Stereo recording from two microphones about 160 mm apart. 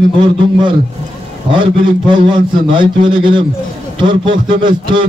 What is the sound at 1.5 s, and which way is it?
Mantra, 30° right (ahead or behind).